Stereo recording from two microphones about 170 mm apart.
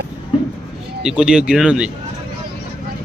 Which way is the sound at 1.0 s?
5° right (ahead or behind).